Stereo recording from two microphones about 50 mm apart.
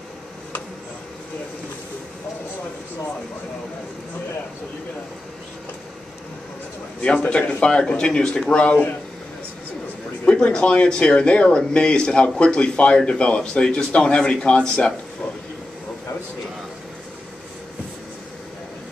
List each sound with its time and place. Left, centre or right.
7.0 s speech: left
10.2 s speech: centre